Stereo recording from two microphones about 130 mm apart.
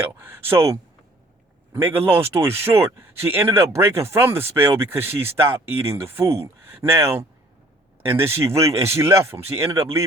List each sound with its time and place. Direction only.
0.0 s speech: 15° right (ahead or behind)
1.7 s speech: 15° right (ahead or behind)